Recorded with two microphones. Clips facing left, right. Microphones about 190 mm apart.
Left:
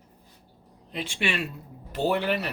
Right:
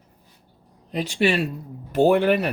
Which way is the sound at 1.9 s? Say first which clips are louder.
Right 8 dB; 50° right (ahead or behind).